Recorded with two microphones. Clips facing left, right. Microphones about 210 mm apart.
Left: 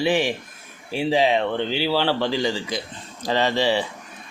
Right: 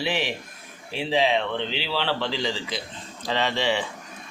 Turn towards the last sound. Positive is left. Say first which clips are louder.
# left 4 dB
turn(degrees=35)  # may be behind; listen again after turning